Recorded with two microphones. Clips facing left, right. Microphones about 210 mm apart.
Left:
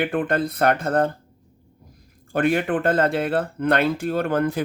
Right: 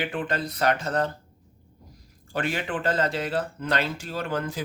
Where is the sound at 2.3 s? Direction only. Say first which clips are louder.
Left 8 dB; 55° left (ahead or behind).